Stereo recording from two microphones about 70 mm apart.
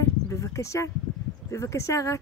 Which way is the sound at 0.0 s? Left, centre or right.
Left.